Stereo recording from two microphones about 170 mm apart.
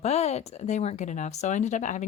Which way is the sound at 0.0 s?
40° left (ahead or behind).